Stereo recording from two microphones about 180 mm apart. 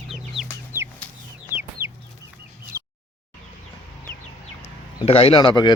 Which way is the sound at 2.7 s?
15° right (ahead or behind).